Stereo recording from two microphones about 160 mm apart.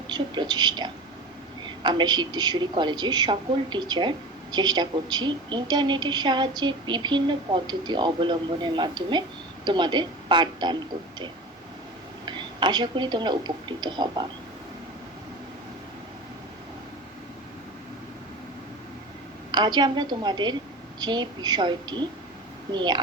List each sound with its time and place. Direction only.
0.1 s a woman's voice: 25° right (ahead or behind)
12.2 s speech: 30° right (ahead or behind)
19.5 s a woman's voice: 25° right (ahead or behind)